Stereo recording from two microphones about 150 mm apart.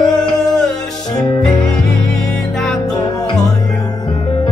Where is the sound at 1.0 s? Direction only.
25° left (ahead or behind).